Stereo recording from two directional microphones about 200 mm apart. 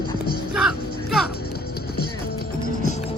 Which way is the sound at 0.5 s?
Centre (ahead or behind).